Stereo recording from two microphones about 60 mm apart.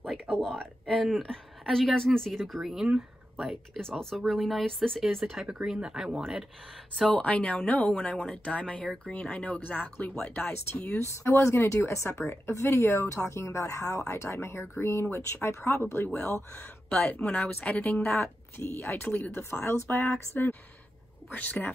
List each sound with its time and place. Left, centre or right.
0.3 s a woman's voice: centre
5.2 s speech: centre
7.1 s speech: left
11.2 s speech: left
17.3 s speech: left
18.6 s speech: left
21.3 s speech: left